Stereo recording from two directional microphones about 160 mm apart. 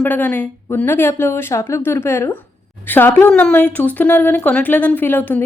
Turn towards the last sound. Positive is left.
turn(degrees=10)  # may be behind; listen again after turning